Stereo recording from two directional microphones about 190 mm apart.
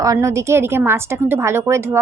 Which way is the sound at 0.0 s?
15° right (ahead or behind).